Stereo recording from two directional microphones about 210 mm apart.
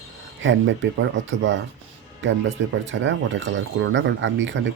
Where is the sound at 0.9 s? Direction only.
60° right (ahead or behind).